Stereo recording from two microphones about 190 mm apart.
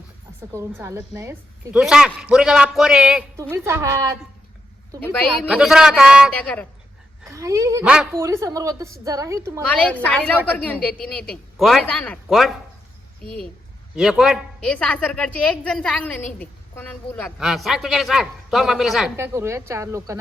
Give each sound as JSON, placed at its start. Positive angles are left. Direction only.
{"t": 0.5, "sound": "a woman's voice", "side_deg": -15}
{"t": 3.5, "sound": "a woman's voice", "side_deg": -15}
{"t": 5.5, "sound": "a woman's voice", "side_deg": -5}
{"t": 7.3, "sound": "a woman's voice", "side_deg": -15}
{"t": 7.9, "sound": "a woman's voice", "side_deg": -5}
{"t": 8.2, "sound": "a woman's voice", "side_deg": -15}
{"t": 9.6, "sound": "a woman's voice", "side_deg": 5}
{"t": 13.9, "sound": "a woman's voice", "side_deg": 0}
{"t": 19.1, "sound": "a woman's voice", "side_deg": -15}